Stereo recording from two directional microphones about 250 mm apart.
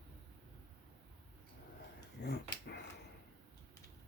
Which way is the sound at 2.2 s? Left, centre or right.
Left.